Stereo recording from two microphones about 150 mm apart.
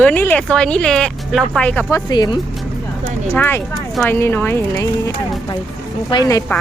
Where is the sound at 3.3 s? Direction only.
15° left (ahead or behind).